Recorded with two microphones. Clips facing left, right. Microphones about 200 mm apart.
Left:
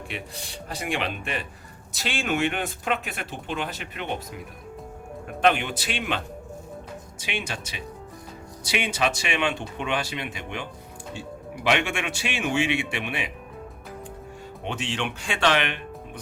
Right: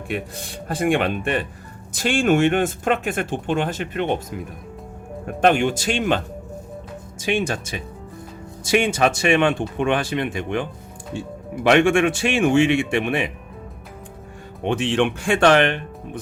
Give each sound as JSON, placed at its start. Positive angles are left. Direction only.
{"t": 0.1, "sound": "speech", "side_deg": -50}
{"t": 5.2, "sound": "speech", "side_deg": -45}
{"t": 14.6, "sound": "speech", "side_deg": -55}